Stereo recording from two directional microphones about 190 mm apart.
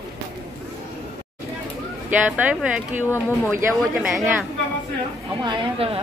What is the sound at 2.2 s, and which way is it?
Speech, 5° right (ahead or behind).